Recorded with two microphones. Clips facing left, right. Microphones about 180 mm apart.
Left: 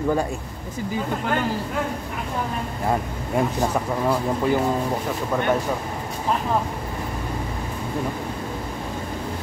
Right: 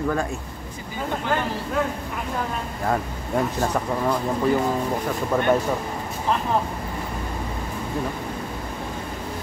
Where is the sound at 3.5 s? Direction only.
5° left (ahead or behind).